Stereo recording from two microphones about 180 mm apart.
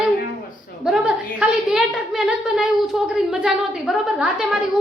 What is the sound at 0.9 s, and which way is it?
A woman's voice, 5° right (ahead or behind).